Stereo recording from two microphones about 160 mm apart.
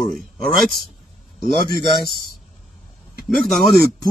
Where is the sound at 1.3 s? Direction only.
65° right (ahead or behind).